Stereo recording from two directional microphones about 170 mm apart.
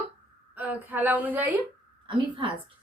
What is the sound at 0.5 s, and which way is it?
A woman's voice, 10° right (ahead or behind).